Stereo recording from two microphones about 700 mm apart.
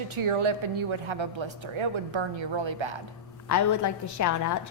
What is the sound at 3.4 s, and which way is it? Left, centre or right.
A woman's voice, left.